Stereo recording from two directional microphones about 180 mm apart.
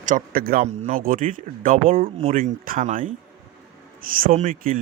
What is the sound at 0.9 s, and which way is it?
Speech, 50° right (ahead or behind).